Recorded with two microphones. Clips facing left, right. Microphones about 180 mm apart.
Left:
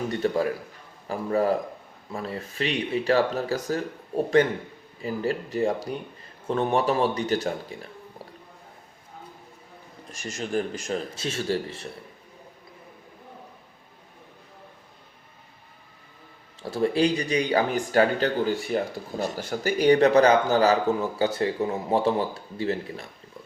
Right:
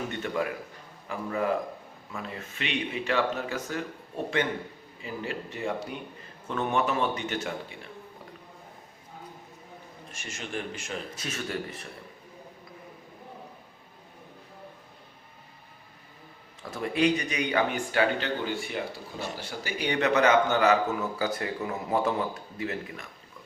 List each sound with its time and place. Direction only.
0.1 s speech: 35° left (ahead or behind)
10.1 s speech: 35° left (ahead or behind)
16.6 s speech: 30° left (ahead or behind)